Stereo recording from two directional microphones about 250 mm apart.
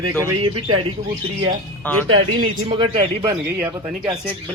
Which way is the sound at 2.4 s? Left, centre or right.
Right.